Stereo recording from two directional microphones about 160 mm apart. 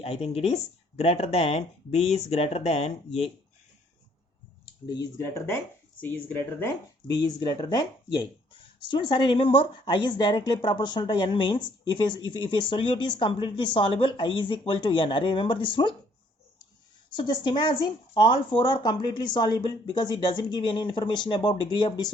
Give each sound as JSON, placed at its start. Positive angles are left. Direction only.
{"t": 0.0, "sound": "speech", "side_deg": 40}
{"t": 4.9, "sound": "a woman's voice", "side_deg": 25}
{"t": 7.2, "sound": "a woman's voice", "side_deg": 25}
{"t": 17.2, "sound": "a woman's voice", "side_deg": 30}